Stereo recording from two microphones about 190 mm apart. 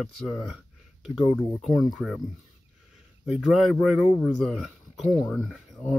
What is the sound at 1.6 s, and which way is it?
Speech, centre (ahead or behind).